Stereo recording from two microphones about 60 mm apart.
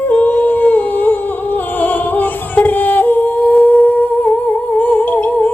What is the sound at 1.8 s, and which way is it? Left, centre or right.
Yodeling, left.